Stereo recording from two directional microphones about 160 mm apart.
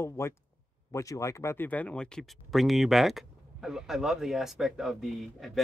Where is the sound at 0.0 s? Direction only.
15° left (ahead or behind).